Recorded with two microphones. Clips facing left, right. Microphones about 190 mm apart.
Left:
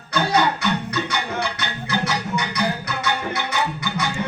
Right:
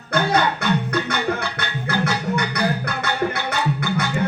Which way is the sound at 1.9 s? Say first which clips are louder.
Right 2 dB; 55° right (ahead or behind).